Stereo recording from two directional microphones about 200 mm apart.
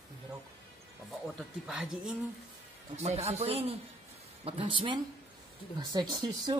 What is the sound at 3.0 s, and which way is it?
A man's voice, 35° right (ahead or behind).